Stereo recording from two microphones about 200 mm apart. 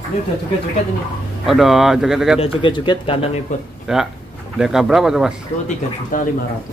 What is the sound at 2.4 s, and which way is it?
Speech, 25° left (ahead or behind).